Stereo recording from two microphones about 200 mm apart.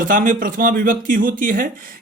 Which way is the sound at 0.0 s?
45° right (ahead or behind).